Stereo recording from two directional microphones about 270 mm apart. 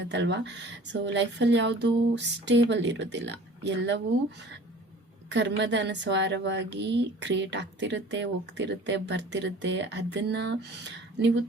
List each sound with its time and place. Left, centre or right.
0.0 s a woman's voice: right
5.3 s a woman's voice: right